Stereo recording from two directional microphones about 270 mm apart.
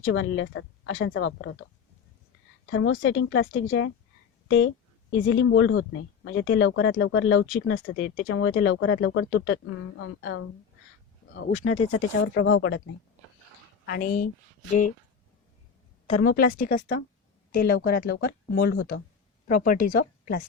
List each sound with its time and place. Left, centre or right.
0.0 s speech: left
2.6 s speech: left
11.6 s speech: left
12.2 s speech: left
13.8 s speech: left
16.2 s a woman's voice: left